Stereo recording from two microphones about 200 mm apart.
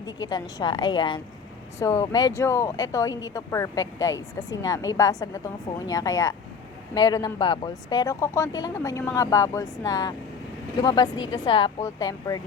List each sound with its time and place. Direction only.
0.0 s a woman's voice: 20° left (ahead or behind)